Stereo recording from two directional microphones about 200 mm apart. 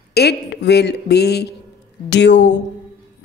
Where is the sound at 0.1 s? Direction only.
55° left (ahead or behind).